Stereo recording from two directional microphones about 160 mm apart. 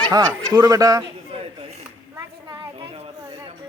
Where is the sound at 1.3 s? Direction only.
35° right (ahead or behind).